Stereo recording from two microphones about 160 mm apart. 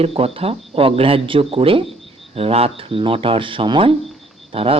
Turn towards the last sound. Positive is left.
turn(degrees=-35)  # may be behind; listen again after turning